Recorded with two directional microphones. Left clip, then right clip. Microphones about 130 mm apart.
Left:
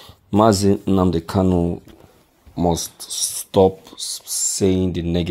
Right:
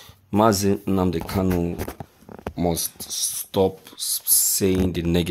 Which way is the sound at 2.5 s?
10° left (ahead or behind).